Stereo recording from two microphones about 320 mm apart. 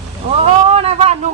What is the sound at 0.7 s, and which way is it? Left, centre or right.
Speech, centre.